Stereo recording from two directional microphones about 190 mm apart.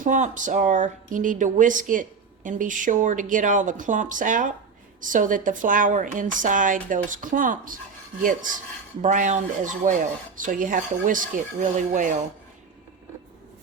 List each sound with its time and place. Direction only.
0.0 s speech: 40° right (ahead or behind)